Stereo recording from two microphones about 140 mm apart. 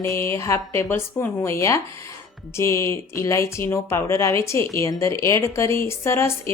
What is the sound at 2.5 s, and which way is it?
A woman's voice, 20° left (ahead or behind).